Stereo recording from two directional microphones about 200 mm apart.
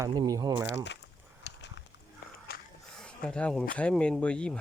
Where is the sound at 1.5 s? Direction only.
55° left (ahead or behind).